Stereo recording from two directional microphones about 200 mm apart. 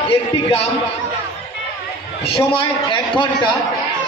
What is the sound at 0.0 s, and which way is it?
Speech, 30° left (ahead or behind).